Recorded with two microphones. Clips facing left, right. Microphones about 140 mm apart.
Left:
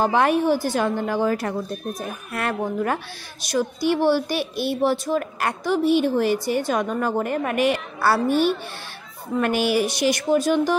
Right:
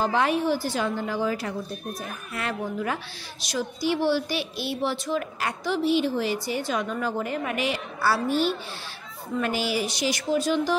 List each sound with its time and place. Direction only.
0.0 s a woman's voice: 55° left (ahead or behind)